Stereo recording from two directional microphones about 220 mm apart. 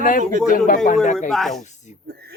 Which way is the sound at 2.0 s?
45° right (ahead or behind).